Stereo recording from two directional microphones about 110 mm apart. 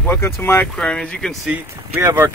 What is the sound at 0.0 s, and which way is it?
Speech, 20° left (ahead or behind).